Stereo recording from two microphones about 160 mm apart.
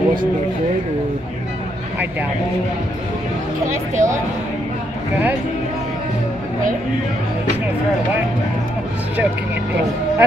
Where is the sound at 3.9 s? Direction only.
50° right (ahead or behind).